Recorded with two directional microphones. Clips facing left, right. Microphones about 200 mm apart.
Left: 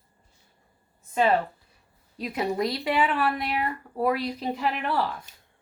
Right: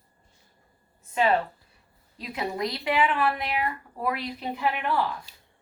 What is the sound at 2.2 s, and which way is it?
Speech, 40° left (ahead or behind).